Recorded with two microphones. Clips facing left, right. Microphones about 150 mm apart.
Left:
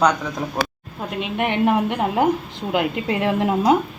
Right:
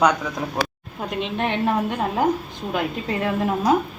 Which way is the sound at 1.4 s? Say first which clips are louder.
Left 4 dB; 15° left (ahead or behind).